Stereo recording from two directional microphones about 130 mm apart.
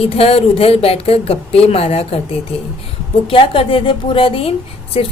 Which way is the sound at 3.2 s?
45° left (ahead or behind).